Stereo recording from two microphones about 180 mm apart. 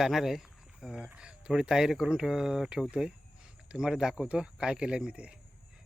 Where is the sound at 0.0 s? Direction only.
Centre (ahead or behind).